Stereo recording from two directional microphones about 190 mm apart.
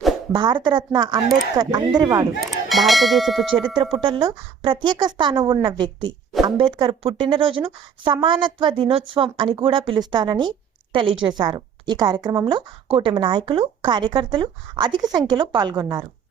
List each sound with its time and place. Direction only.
0.3 s a woman's voice: 25° right (ahead or behind)
2.4 s bell: centre (ahead or behind)
3.9 s a woman's voice: 25° right (ahead or behind)